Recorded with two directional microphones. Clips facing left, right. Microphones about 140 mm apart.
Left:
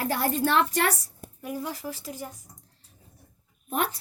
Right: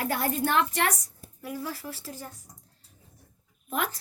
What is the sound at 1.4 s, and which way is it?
Speech, 20° left (ahead or behind).